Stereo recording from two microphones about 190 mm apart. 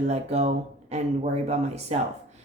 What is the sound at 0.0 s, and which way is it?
Speech, 35° right (ahead or behind).